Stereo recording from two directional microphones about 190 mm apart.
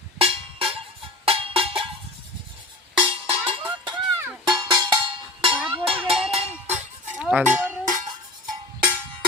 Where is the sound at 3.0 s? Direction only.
25° right (ahead or behind).